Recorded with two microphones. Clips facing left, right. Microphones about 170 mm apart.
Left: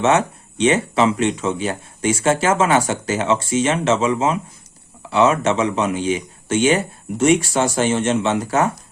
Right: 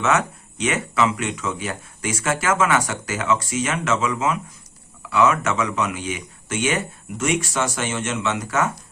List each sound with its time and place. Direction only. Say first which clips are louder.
0.0 s speech: left 4 dB; 30° left (ahead or behind)